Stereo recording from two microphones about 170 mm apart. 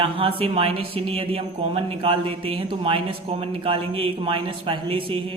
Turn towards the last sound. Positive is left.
turn(degrees=-30)  # may be behind; listen again after turning